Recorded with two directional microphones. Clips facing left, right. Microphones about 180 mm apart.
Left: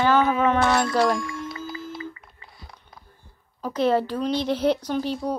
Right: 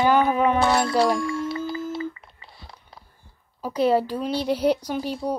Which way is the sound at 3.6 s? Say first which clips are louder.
Right 1 dB; 10° right (ahead or behind).